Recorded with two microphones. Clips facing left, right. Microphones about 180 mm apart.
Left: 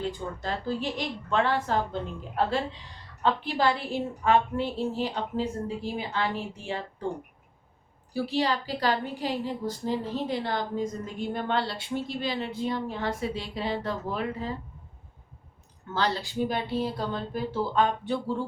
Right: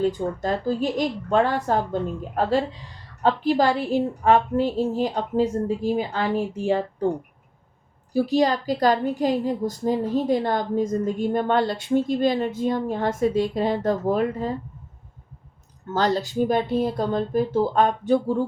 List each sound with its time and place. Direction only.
0.0 s a woman's voice: 45° right (ahead or behind)
8.1 s a woman's voice: 45° right (ahead or behind)
15.9 s a woman's voice: 45° right (ahead or behind)